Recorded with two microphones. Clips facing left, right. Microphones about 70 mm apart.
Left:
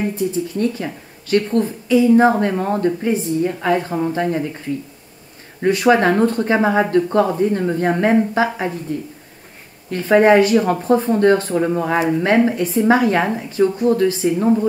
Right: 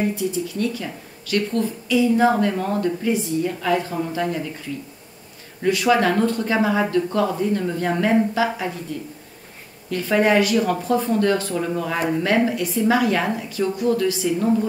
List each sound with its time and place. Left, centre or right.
0.1 s a woman's voice: left
9.8 s a woman's voice: left